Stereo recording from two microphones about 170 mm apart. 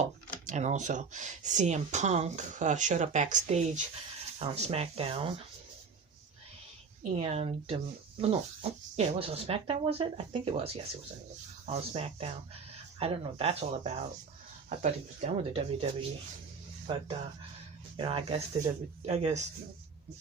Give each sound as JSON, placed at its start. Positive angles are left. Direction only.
{"t": 0.0, "sound": "speech", "side_deg": -45}
{"t": 7.0, "sound": "speech", "side_deg": -40}